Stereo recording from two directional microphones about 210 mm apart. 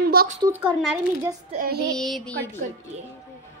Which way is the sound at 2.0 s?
5° left (ahead or behind).